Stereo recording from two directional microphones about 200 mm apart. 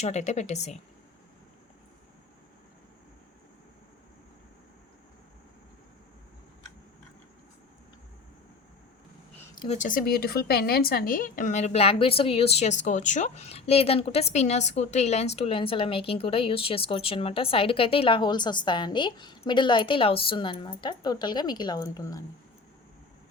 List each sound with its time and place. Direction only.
0.0 s speech: 35° left (ahead or behind)
9.6 s speech: 35° left (ahead or behind); by 22.2 s 20° left (ahead or behind)